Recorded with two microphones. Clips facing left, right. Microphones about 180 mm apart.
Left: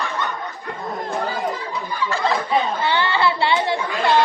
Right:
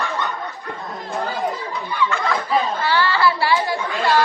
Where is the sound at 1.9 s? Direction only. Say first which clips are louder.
Even; 35° left (ahead or behind).